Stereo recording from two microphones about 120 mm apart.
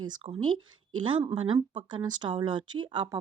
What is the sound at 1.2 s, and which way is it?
Speech, 35° right (ahead or behind).